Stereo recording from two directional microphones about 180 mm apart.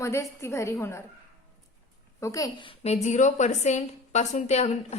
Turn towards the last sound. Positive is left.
turn(degrees=35)  # may be behind; listen again after turning